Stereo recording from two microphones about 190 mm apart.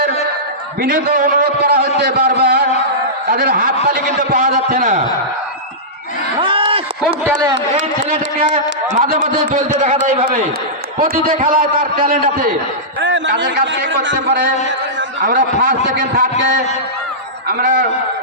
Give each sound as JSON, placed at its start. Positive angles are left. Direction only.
{"t": 0.8, "sound": "a man's voice", "side_deg": -50}
{"t": 6.4, "sound": "a sound", "side_deg": -25}
{"t": 8.5, "sound": "a man's voice", "side_deg": -35}
{"t": 13.0, "sound": "a sound", "side_deg": -75}
{"t": 13.7, "sound": "a man's voice", "side_deg": -70}
{"t": 15.2, "sound": "a man's voice", "side_deg": -45}
{"t": 17.5, "sound": "a man's voice", "side_deg": -45}